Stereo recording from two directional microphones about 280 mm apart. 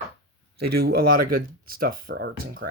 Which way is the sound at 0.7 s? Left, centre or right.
Right.